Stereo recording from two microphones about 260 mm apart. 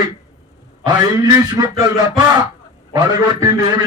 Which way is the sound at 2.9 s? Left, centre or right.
Centre.